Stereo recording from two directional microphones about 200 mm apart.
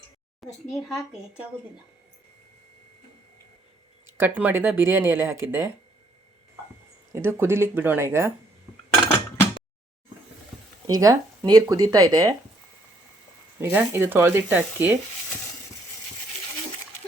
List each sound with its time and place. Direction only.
0.7 s a woman's voice: centre (ahead or behind)
4.0 s speech: 10° right (ahead or behind)
7.1 s speech: 10° right (ahead or behind)
10.8 s speech: 15° right (ahead or behind)
13.6 s speech: 10° right (ahead or behind)